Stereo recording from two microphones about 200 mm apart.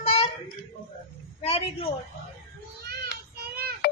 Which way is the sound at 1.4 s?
30° left (ahead or behind).